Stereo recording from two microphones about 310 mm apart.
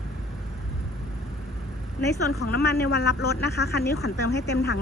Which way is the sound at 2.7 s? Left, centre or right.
Left.